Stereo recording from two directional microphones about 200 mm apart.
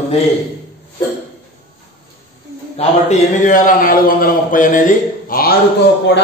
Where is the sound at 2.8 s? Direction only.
35° left (ahead or behind).